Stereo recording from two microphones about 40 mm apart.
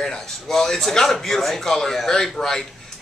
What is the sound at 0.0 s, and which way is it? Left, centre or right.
Speech, centre.